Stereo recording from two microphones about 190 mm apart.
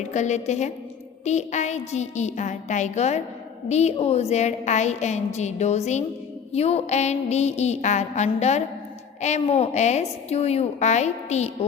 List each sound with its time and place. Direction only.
0.1 s a woman's voice: 40° left (ahead or behind)